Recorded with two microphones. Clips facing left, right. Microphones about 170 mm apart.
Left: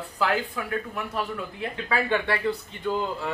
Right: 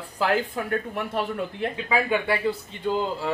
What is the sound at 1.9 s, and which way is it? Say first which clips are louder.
Speech: right 1 dB; 15° right (ahead or behind).